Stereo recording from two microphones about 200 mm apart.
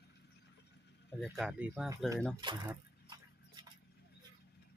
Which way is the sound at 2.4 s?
25° right (ahead or behind).